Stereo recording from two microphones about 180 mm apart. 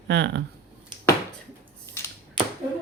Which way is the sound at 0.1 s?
70° right (ahead or behind).